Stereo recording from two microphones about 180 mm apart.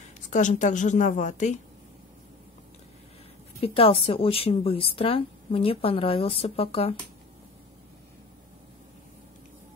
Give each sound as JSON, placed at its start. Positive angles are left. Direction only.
{"t": 0.3, "sound": "a woman's voice", "side_deg": 45}
{"t": 3.6, "sound": "a woman's voice", "side_deg": 30}